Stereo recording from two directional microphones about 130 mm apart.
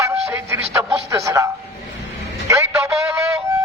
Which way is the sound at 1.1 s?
25° right (ahead or behind).